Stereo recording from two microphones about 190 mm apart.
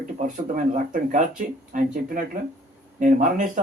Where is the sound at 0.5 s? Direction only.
45° right (ahead or behind).